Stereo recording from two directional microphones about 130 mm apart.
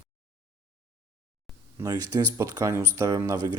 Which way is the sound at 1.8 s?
25° right (ahead or behind).